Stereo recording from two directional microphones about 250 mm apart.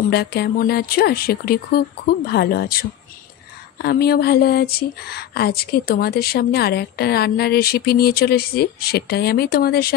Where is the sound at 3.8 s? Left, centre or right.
Left.